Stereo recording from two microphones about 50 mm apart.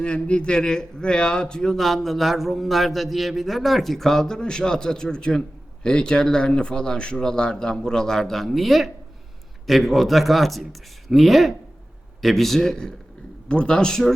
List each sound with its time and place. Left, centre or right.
0.0 s a man's voice: left